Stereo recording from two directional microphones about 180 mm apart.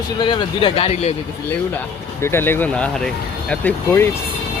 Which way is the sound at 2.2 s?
15° left (ahead or behind).